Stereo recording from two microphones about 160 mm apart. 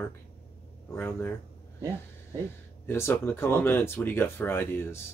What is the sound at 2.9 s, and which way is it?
Speech, 15° left (ahead or behind).